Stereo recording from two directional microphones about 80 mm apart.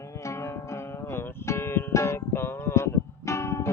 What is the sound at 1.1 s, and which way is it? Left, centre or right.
Music, left.